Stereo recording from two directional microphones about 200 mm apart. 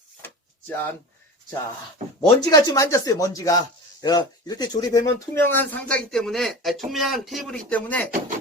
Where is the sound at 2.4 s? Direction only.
20° left (ahead or behind).